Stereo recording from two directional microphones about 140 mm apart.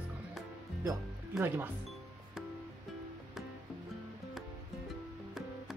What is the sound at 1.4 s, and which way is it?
Speech, 15° right (ahead or behind).